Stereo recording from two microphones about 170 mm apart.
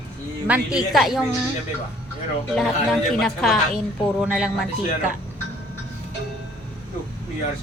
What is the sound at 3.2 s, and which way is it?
A woman's voice, 5° left (ahead or behind).